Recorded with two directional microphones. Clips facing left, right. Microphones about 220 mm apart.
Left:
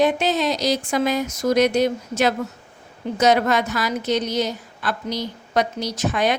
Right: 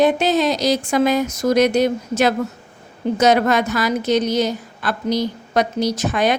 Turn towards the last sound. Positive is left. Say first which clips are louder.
# right 3 dB
turn(degrees=-45)  # may be behind; listen again after turning